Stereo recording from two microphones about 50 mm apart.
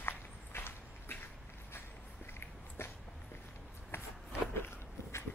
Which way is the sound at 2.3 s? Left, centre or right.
Left.